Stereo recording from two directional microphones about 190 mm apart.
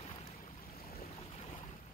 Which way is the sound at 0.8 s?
50° left (ahead or behind).